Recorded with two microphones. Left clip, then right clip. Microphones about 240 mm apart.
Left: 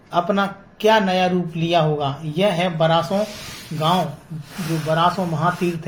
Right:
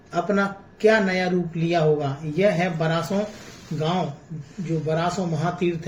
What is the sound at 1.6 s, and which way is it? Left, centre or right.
Speech, left.